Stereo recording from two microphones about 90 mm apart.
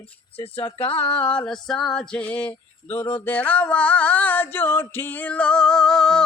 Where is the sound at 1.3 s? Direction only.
5° left (ahead or behind).